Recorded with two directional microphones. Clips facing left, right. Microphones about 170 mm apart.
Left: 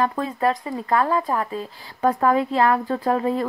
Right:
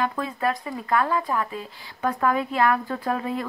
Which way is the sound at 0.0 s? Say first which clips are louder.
Left 4 dB; 35° left (ahead or behind).